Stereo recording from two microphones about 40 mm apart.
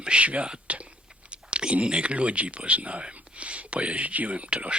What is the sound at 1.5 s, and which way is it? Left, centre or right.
Speech, right.